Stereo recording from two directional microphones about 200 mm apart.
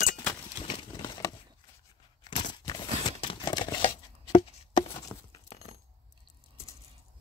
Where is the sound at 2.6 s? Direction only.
25° left (ahead or behind).